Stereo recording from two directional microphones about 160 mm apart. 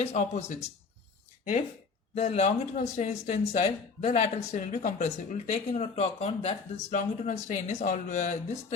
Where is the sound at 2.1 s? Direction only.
40° left (ahead or behind).